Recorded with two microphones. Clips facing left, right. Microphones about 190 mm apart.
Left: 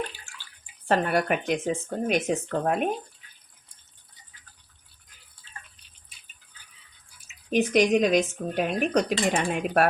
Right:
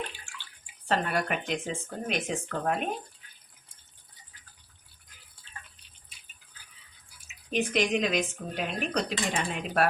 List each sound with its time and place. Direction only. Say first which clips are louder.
0.9 s speech: left 5 dB; 50° left (ahead or behind)
7.5 s speech: left 6 dB; 45° left (ahead or behind)